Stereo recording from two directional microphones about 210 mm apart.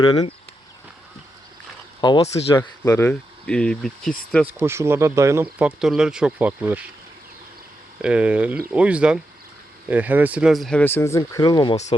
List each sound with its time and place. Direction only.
0.0 s speech: 20° left (ahead or behind)
2.0 s speech: 20° left (ahead or behind); by 4.1 s centre (ahead or behind)
4.4 s speech: 10° right (ahead or behind)
8.0 s speech: 5° right (ahead or behind); by 11.8 s 20° left (ahead or behind)